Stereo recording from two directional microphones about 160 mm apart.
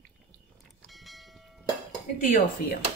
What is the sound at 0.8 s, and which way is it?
Church bell, centre (ahead or behind).